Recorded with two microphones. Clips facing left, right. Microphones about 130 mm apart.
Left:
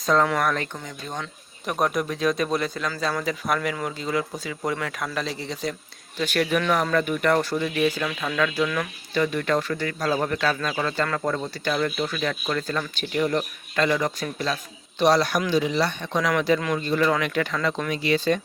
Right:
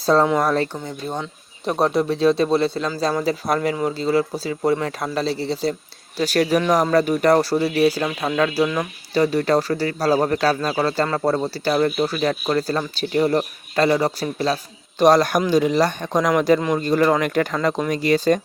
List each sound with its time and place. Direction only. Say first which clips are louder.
0.0 s speech: right 4 dB; 30° right (ahead or behind)